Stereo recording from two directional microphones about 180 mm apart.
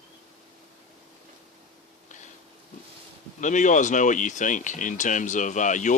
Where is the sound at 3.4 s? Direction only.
45° left (ahead or behind).